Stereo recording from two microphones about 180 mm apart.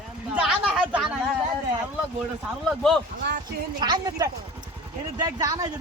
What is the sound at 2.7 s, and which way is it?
Speech, centre (ahead or behind).